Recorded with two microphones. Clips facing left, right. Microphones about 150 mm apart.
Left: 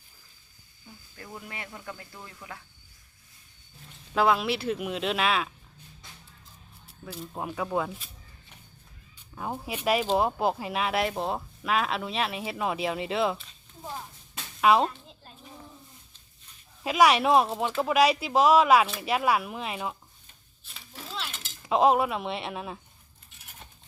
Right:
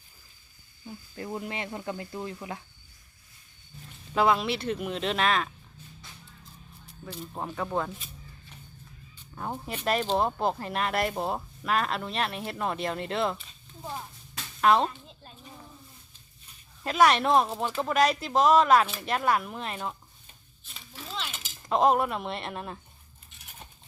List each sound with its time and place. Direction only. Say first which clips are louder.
0.9 s speech: right 8 dB; 25° right (ahead or behind)
4.1 s speech: even; centre (ahead or behind)
6.8 s speech: even; 5° left (ahead or behind)
9.3 s speech: left 1 dB; 5° left (ahead or behind)
14.6 s a sound: left 1 dB; 5° left (ahead or behind)
16.8 s speech: left 1 dB; 10° left (ahead or behind)
20.7 s cutlery: even; centre (ahead or behind)